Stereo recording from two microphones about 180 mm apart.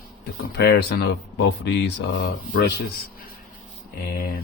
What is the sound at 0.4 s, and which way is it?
Speech, 65° left (ahead or behind).